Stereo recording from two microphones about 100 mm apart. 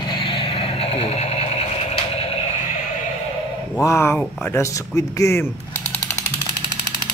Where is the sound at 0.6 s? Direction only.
85° left.